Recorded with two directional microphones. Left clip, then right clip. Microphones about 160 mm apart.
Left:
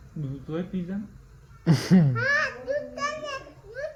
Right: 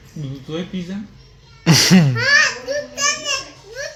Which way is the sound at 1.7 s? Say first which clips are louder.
Right 11 dB; 35° right (ahead or behind).